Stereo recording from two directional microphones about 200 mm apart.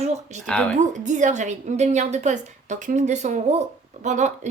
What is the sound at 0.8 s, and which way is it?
Speech, 35° right (ahead or behind).